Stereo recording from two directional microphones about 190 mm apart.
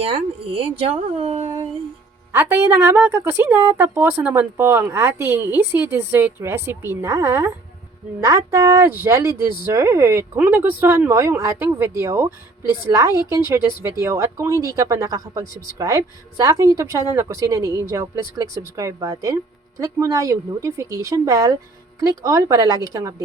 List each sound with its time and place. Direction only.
0.0 s speech: 30° right (ahead or behind)
1.5 s a sound: 30° right (ahead or behind)
2.3 s a woman's voice: 15° right (ahead or behind)